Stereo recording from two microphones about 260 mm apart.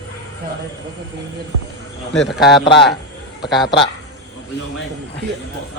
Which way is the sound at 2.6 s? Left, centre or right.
Centre.